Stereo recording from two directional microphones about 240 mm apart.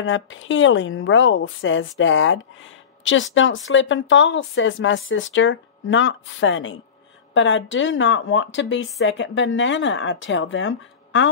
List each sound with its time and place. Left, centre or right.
0.0 s speech: left